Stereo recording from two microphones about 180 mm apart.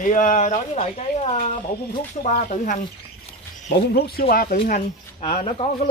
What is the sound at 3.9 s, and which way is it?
Speech, 60° left (ahead or behind).